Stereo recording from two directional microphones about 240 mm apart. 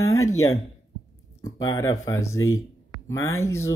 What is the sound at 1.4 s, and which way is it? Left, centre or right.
Speech, centre.